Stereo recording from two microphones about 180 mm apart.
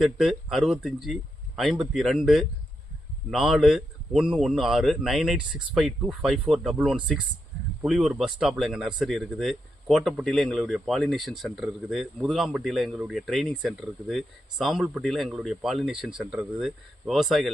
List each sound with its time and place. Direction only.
0.0 s speech: centre (ahead or behind)